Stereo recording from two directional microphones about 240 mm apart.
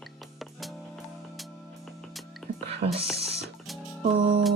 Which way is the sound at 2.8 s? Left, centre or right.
Right.